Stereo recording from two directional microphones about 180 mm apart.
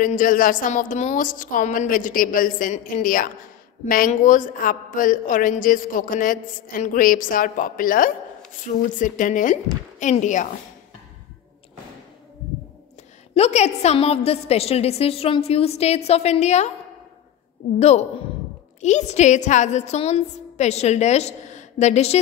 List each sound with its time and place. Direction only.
0.0 s a woman's voice: 50° left (ahead or behind)
13.3 s a woman's voice: 35° left (ahead or behind)
17.7 s a woman's voice: 35° left (ahead or behind)